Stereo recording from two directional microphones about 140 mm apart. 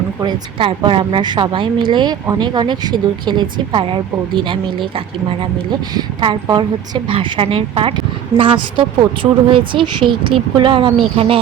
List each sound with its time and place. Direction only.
0.2 s speech: 30° right (ahead or behind)